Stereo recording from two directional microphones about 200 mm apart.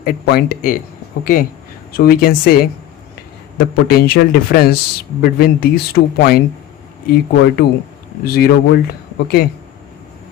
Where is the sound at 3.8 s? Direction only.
50° left (ahead or behind).